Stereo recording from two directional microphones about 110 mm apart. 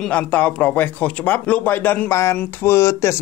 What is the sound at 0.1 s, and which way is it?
Speech, 15° left (ahead or behind).